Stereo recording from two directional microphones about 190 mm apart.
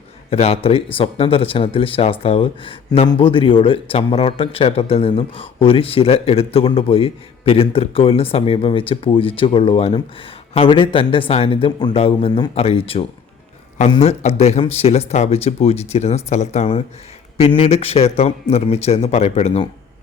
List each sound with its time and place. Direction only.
0.3 s speech: 30° left (ahead or behind)